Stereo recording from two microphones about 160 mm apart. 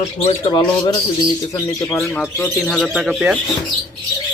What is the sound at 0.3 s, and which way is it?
Speech, 25° left (ahead or behind).